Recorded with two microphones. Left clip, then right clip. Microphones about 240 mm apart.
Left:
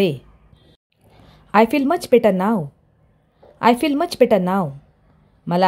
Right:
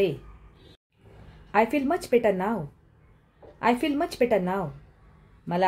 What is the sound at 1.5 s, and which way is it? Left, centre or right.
A woman's voice, left.